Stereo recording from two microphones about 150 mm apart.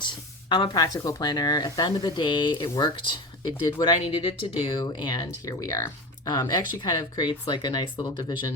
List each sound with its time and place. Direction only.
0.0 s speech: 30° left (ahead or behind)